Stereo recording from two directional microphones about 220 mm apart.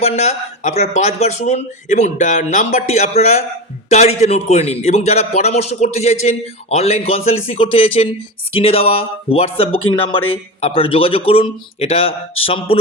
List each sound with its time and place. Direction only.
0.0 s a man's voice: 30° left (ahead or behind)